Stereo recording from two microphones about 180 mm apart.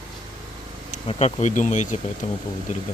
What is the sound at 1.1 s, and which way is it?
Speech, 35° left (ahead or behind).